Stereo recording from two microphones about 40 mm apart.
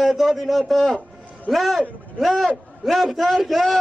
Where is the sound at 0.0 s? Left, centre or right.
Centre.